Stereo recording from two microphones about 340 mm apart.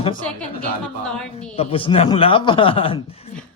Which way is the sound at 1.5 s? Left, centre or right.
Centre.